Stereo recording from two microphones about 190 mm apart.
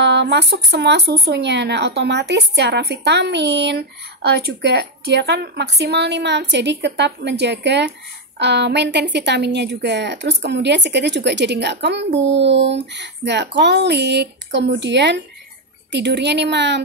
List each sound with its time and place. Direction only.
0.0 s speech: 65° right (ahead or behind)